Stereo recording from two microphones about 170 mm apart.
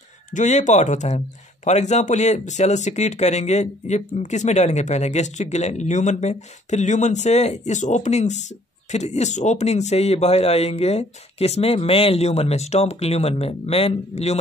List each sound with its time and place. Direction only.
0.3 s speech: 45° left (ahead or behind)